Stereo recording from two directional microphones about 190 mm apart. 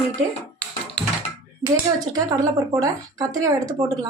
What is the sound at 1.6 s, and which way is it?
Speech, 20° right (ahead or behind).